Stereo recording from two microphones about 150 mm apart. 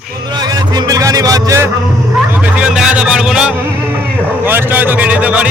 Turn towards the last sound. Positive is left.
turn(degrees=-10)  # may be behind; listen again after turning